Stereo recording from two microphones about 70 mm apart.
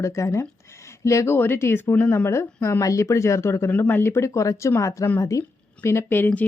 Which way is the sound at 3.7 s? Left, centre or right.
Left.